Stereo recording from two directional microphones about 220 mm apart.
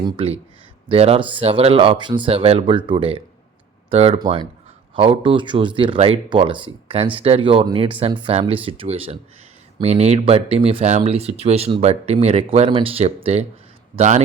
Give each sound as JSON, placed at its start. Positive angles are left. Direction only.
{"t": 0.0, "sound": "a man's voice", "side_deg": -25}